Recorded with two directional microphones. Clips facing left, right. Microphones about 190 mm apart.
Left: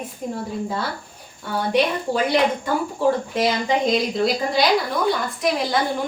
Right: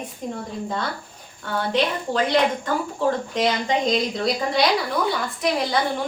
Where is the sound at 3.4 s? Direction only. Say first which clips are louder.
Left 1 dB; 5° left (ahead or behind).